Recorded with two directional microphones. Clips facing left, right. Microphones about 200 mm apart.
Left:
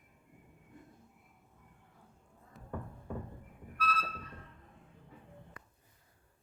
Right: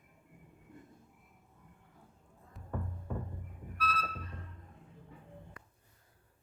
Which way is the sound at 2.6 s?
Centre (ahead or behind).